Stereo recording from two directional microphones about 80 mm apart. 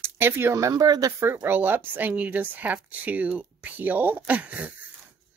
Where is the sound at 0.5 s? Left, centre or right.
Right.